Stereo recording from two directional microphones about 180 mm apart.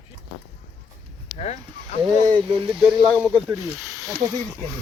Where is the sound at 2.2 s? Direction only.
30° right (ahead or behind).